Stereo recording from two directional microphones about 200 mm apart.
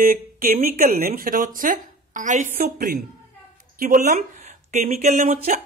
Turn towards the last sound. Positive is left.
turn(degrees=-45)  # may be behind; listen again after turning